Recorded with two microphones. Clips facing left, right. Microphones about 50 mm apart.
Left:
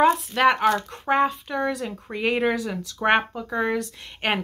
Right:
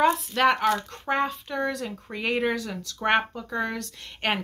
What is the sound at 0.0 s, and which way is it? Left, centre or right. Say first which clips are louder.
Speech: left 3 dB; centre.